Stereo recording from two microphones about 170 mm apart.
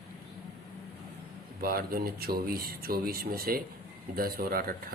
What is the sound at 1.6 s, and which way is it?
Speech, 60° right (ahead or behind).